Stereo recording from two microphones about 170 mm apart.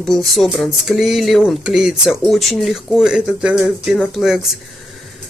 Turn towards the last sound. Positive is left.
turn(degrees=0)  # may be behind; listen again after turning